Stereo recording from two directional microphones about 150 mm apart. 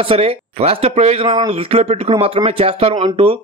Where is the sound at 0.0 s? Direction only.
40° right (ahead or behind).